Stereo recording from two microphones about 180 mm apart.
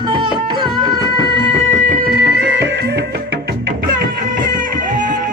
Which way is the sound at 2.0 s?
70° right (ahead or behind).